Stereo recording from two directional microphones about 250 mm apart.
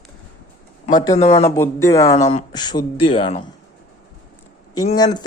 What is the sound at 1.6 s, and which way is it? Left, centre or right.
Speech, centre.